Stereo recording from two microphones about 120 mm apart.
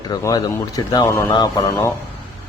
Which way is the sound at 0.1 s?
30° left (ahead or behind).